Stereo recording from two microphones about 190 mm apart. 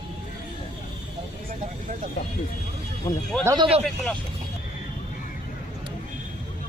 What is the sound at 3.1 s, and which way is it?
Speech, 20° left (ahead or behind).